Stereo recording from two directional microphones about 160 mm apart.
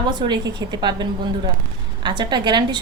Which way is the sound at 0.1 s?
25° right (ahead or behind).